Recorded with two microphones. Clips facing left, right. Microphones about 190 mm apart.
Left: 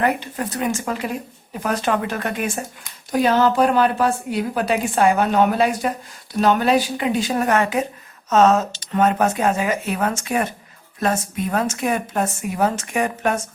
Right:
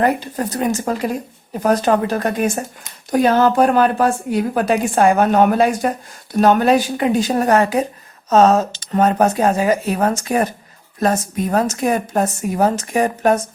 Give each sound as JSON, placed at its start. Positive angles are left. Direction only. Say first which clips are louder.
{"t": 0.0, "sound": "a woman's voice", "louder": "right 4 dB", "side_deg": -35}